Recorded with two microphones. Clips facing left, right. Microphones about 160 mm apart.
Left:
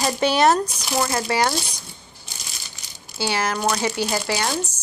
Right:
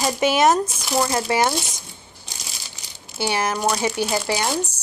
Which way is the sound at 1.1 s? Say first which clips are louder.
Right 1 dB; 20° right (ahead or behind).